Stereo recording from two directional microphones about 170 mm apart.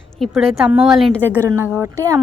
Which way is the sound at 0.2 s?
Centre (ahead or behind).